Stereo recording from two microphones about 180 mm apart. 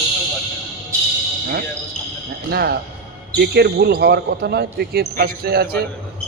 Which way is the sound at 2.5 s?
60° right (ahead or behind).